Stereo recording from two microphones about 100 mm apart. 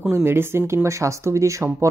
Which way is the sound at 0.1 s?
25° right (ahead or behind).